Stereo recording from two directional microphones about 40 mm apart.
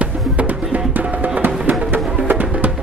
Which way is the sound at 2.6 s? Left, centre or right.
Right.